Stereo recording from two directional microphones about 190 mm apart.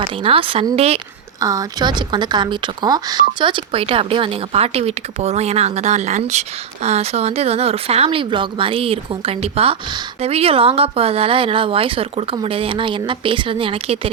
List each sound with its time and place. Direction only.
0.0 s speech: 30° right (ahead or behind)
1.4 s speech: 20° right (ahead or behind)